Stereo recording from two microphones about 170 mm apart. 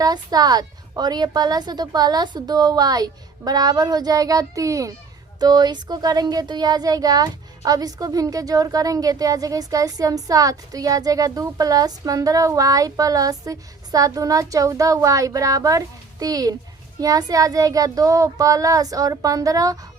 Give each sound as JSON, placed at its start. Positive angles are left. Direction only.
{"t": 0.0, "sound": "speech", "side_deg": -25}